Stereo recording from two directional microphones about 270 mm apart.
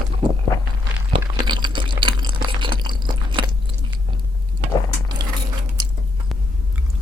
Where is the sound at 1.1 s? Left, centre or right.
Centre.